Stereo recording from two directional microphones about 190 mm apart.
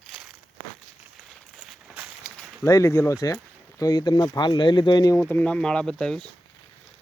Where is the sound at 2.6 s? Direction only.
15° left (ahead or behind).